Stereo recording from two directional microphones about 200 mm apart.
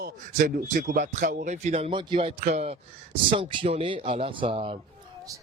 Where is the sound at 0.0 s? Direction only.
40° right (ahead or behind).